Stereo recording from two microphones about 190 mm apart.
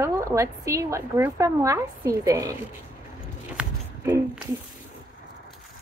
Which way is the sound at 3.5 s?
10° right (ahead or behind).